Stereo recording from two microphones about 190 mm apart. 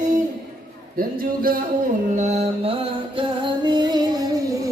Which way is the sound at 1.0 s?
50° right (ahead or behind).